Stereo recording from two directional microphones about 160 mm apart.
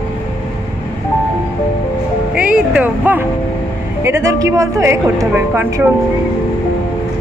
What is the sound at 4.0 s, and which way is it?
A woman's voice, 15° right (ahead or behind).